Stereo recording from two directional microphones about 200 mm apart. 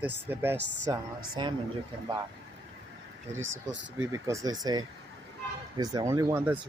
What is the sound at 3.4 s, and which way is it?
Speech, 70° right (ahead or behind).